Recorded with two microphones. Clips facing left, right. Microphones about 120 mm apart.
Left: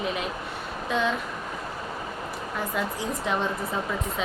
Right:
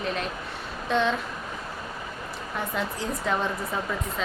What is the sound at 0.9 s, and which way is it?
Speech, 5° left (ahead or behind).